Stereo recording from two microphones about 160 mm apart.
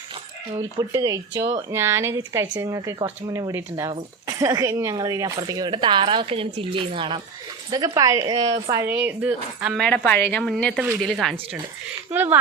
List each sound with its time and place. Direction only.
0.8 s a woman's voice: 20° right (ahead or behind)
7.7 s speech: 20° right (ahead or behind)
9.0 s a woman's voice: 10° right (ahead or behind)
12.1 s a woman's voice: 15° right (ahead or behind)